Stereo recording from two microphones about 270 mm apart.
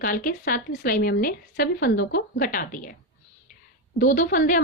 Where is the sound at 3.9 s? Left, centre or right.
Left.